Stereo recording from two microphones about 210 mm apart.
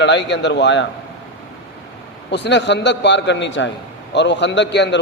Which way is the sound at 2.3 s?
55° left (ahead or behind).